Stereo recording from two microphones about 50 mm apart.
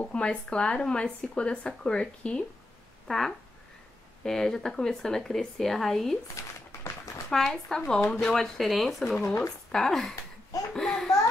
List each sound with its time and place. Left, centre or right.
0.0 s speech: left
3.1 s speech: centre
6.4 s speech: left
6.8 s a sound: left
7.2 s speech: centre
8.3 s speech: centre
10.7 s a sound: centre